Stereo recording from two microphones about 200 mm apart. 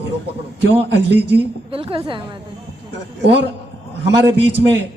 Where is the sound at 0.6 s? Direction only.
60° right (ahead or behind).